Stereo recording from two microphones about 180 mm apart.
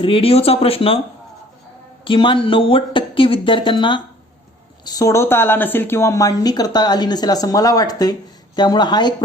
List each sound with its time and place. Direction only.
0.0 s speech: 30° left (ahead or behind)
2.0 s a woman's voice: 30° left (ahead or behind)